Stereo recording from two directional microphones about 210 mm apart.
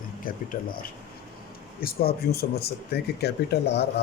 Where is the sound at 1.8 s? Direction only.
45° left (ahead or behind).